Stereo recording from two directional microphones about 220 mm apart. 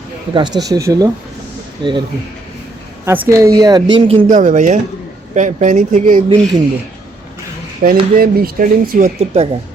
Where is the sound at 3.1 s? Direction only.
15° right (ahead or behind).